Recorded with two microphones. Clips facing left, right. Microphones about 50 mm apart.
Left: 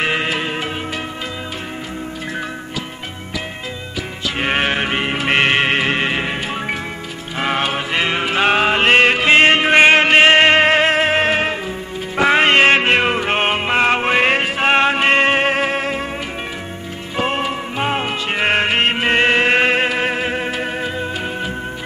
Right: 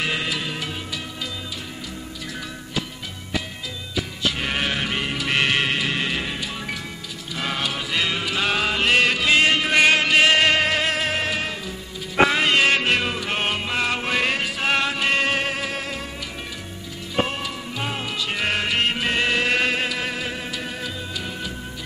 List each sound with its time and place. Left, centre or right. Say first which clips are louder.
0.0 s music: left 6 dB; left
4.4 s music: left 11 dB; left
17.3 s music: left 8 dB; left